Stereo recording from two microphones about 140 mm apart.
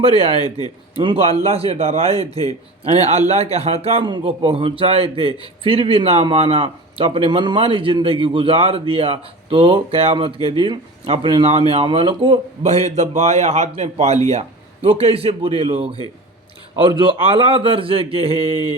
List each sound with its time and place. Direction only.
0.0 s a man's voice: 45° right (ahead or behind)
0.4 s speech: 30° left (ahead or behind)
0.9 s a man's voice: 45° right (ahead or behind)
18.5 s mantra: 30° left (ahead or behind)